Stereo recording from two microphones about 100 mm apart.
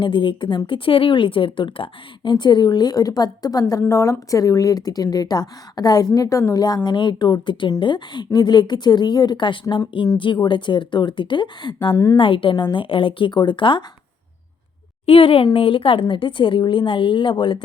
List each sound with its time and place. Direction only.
0.0 s a woman's voice: 55° left (ahead or behind)
15.0 s a woman's voice: 70° left (ahead or behind); by 17.6 s 50° left (ahead or behind)